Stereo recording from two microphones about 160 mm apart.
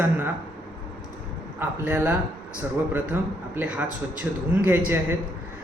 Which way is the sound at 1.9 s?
15° right (ahead or behind).